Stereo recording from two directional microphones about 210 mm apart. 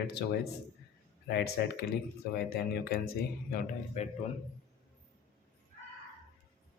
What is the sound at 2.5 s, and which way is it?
Speech, 45° left (ahead or behind).